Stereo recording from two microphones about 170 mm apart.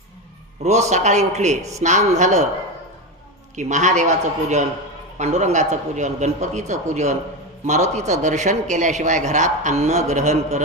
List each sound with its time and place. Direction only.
0.6 s a man's voice: 40° right (ahead or behind)
3.5 s a man's voice: 45° right (ahead or behind)